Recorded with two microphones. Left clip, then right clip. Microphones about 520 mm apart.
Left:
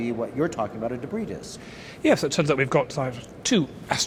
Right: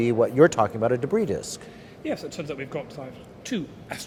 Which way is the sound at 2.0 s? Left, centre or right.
Left.